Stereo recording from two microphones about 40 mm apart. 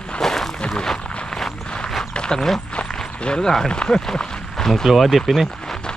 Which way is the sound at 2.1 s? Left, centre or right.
Left.